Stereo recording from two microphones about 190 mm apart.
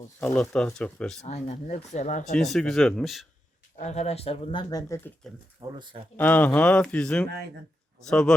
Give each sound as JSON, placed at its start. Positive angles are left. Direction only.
{"t": 0.2, "sound": "speech", "side_deg": 10}
{"t": 1.2, "sound": "speech", "side_deg": 35}
{"t": 2.3, "sound": "speech", "side_deg": 0}
{"t": 3.8, "sound": "speech", "side_deg": 35}
{"t": 4.7, "sound": "speech", "side_deg": 15}
{"t": 5.5, "sound": "speech", "side_deg": -25}
{"t": 6.1, "sound": "speech", "side_deg": 10}